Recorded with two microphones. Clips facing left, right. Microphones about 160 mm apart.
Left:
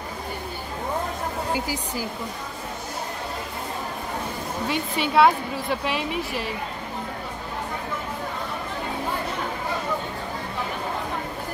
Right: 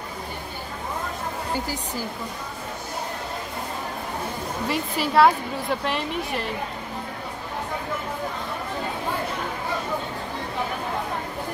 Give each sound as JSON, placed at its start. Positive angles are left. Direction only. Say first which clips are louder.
{"t": 1.5, "sound": "speech", "louder": "left 1 dB", "side_deg": 10}
{"t": 4.6, "sound": "a woman's voice", "louder": "even", "side_deg": 0}